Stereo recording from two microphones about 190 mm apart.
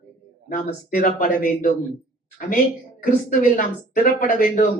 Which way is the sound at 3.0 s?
45° left (ahead or behind).